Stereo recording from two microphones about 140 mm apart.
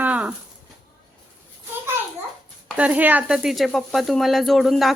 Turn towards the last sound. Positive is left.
turn(degrees=0)  # may be behind; listen again after turning